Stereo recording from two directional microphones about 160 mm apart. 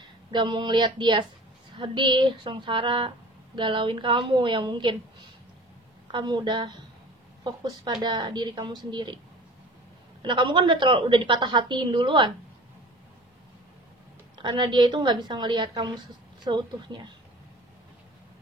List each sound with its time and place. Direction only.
0.3 s a woman's voice: 30° right (ahead or behind)
6.1 s a woman's voice: 30° right (ahead or behind)
10.2 s a woman's voice: 30° right (ahead or behind)
14.4 s a woman's voice: 30° right (ahead or behind)